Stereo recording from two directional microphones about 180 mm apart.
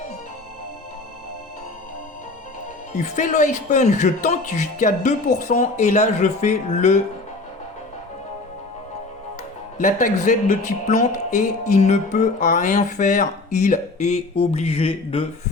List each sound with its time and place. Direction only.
2.9 s speech: 45° left (ahead or behind)
9.7 s music: 45° left (ahead or behind)